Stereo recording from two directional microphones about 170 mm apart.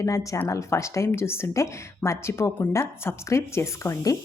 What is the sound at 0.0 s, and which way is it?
A woman's voice, 20° left (ahead or behind).